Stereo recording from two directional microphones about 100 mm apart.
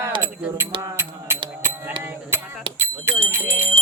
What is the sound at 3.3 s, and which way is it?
Music, 25° right (ahead or behind).